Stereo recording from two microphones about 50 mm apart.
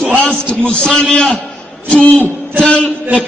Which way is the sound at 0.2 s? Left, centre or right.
Left.